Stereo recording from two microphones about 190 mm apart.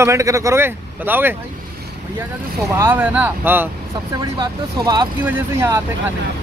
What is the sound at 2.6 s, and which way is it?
Speech, 15° right (ahead or behind).